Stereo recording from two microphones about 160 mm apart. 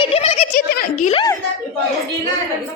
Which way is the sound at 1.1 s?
25° left (ahead or behind).